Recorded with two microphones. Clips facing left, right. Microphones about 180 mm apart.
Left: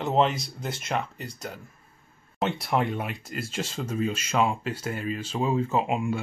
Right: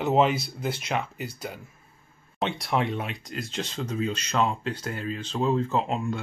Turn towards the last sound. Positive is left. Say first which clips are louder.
# left 1 dB
turn(degrees=10)  # may be behind; listen again after turning